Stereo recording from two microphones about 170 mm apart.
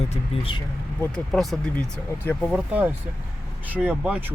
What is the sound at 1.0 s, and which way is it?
Speech, 5° left (ahead or behind).